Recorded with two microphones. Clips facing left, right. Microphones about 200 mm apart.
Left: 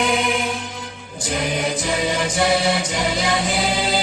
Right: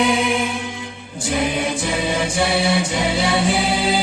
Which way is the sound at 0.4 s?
40° left (ahead or behind).